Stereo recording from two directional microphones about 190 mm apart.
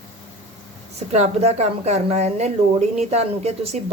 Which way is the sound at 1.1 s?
35° right (ahead or behind).